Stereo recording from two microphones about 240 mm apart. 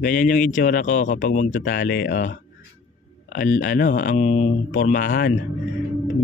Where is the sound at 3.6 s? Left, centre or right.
Left.